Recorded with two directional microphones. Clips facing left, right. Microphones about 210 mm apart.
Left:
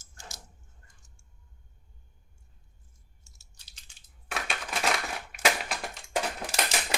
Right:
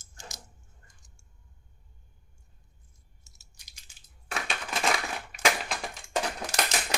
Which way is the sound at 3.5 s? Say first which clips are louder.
Right 1 dB; 15° right (ahead or behind).